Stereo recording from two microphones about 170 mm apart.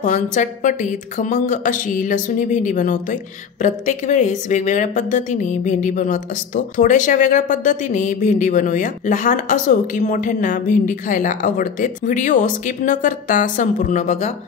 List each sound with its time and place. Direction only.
0.0 s a woman's voice: 45° left (ahead or behind)